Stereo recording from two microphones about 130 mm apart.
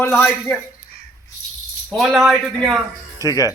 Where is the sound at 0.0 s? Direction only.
15° left (ahead or behind).